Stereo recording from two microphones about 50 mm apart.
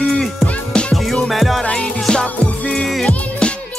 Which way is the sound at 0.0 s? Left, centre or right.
Centre.